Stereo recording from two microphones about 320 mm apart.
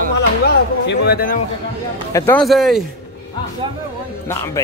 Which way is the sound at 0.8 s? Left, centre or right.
Left.